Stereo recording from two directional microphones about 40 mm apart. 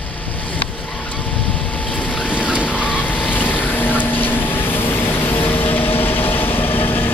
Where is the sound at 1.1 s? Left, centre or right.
Left.